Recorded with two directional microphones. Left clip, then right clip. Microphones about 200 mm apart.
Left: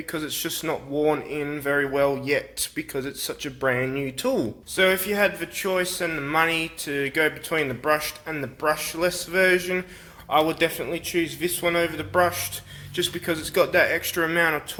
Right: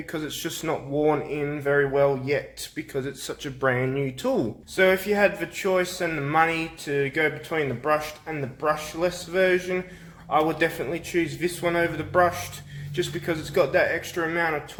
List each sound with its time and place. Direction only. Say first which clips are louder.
0.1 s speech: left 2 dB; 20° left (ahead or behind); by 14.6 s 40° left (ahead or behind)